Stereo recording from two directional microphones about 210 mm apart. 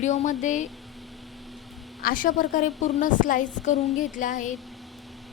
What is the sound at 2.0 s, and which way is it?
A woman's voice, 40° left (ahead or behind).